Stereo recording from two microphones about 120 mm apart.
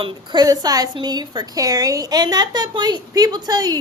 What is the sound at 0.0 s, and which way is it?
A woman's voice, 40° right (ahead or behind).